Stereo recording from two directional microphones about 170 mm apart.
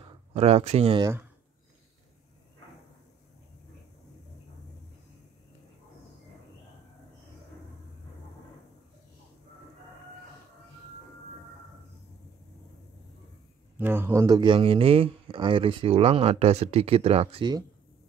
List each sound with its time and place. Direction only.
0.3 s speech: 35° right (ahead or behind)
13.7 s speech: 10° right (ahead or behind)